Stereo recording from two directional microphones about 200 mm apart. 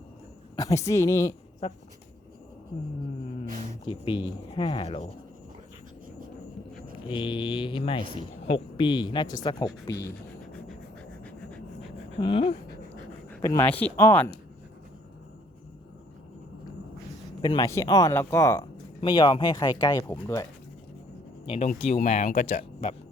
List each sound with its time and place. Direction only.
0.5 s speech: 15° left (ahead or behind)
1.6 s speech: 30° left (ahead or behind)
3.8 s speech: 25° left (ahead or behind)
7.1 s speech: 25° left (ahead or behind)
10.4 s a sound: centre (ahead or behind)
12.2 s speech: 25° left (ahead or behind)
13.3 s speech: 15° left (ahead or behind)
17.4 s speech: 20° left (ahead or behind)
21.4 s speech: 25° left (ahead or behind)